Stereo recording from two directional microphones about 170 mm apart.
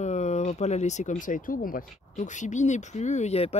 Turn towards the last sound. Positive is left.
turn(degrees=40)  # may be behind; listen again after turning